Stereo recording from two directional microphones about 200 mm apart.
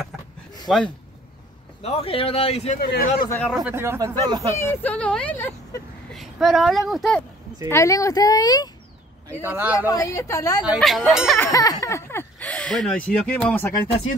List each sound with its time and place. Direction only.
0.7 s speech: centre (ahead or behind)
1.8 s speech: 30° left (ahead or behind)
2.8 s speech: 50° left (ahead or behind)
3.3 s speech: 10° left (ahead or behind)
3.6 s speech: 10° right (ahead or behind)
4.6 s speech: 10° left (ahead or behind)
6.1 s a woman's voice: centre (ahead or behind)
7.7 s speech: 15° left (ahead or behind)
9.4 s speech: 10° right (ahead or behind)
9.8 s speech: 15° left (ahead or behind)
10.6 s speech: centre (ahead or behind)
11.3 s speech: 15° left (ahead or behind)